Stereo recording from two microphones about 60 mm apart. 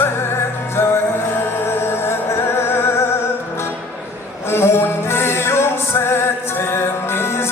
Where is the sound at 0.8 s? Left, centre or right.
Left.